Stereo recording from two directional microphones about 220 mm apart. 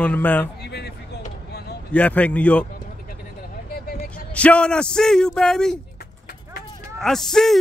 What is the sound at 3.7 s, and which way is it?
Vehicle, 45° left (ahead or behind).